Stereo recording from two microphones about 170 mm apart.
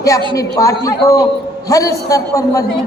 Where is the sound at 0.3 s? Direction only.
20° left (ahead or behind).